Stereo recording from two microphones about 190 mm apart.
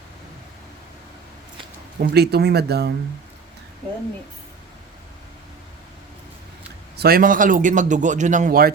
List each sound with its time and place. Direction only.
2.0 s speech: 55° right (ahead or behind)
6.9 s a man's voice: 55° right (ahead or behind)